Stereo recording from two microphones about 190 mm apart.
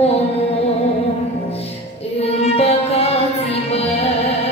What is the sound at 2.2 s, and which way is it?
Music, 35° left (ahead or behind).